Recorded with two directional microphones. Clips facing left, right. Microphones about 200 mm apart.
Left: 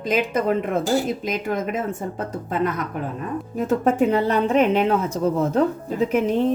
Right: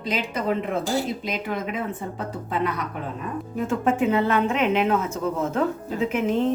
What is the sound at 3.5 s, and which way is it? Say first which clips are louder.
Speech: left 4 dB; 40° left (ahead or behind).